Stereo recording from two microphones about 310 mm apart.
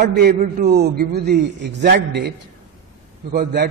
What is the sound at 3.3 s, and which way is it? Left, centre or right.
Speech, right.